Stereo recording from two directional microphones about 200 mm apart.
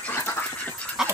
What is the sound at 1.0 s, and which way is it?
Dog, 5° right (ahead or behind).